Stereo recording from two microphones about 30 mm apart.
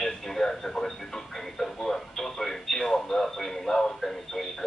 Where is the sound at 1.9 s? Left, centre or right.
Centre.